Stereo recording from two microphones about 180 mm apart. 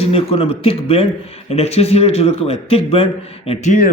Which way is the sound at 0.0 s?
30° left (ahead or behind).